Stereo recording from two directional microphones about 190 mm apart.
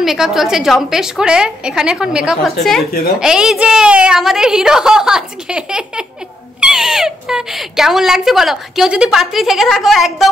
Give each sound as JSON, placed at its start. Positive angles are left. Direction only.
{"t": 0.0, "sound": "speech", "side_deg": 0}